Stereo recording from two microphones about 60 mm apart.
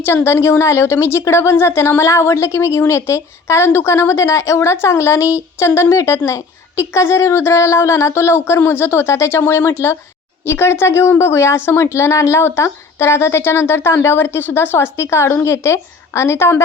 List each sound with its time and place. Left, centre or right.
0.0 s a woman's voice: left
14.9 s a woman's voice: left